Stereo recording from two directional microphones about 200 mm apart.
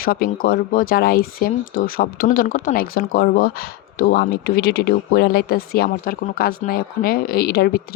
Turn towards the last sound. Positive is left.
turn(degrees=50)  # may be behind; listen again after turning